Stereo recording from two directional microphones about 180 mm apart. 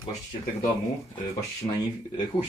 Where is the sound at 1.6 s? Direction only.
25° left (ahead or behind).